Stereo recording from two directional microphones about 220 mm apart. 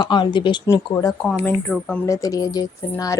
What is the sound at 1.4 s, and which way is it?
Speech, 5° left (ahead or behind).